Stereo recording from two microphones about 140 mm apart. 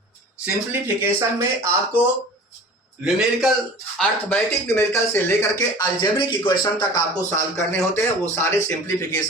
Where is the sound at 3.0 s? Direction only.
Centre (ahead or behind).